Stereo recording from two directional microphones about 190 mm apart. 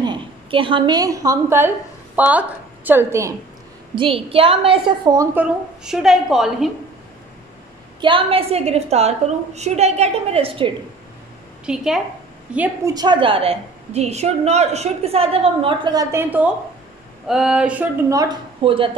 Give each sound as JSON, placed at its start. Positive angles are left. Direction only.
{"t": 0.0, "sound": "a woman's voice", "side_deg": -25}
{"t": 3.9, "sound": "a woman's voice", "side_deg": -30}
{"t": 8.0, "sound": "a woman's voice", "side_deg": -25}
{"t": 11.6, "sound": "a woman's voice", "side_deg": -5}
{"t": 12.9, "sound": "a woman's voice", "side_deg": -25}
{"t": 17.3, "sound": "a sound", "side_deg": -5}
{"t": 18.1, "sound": "a woman's voice", "side_deg": -25}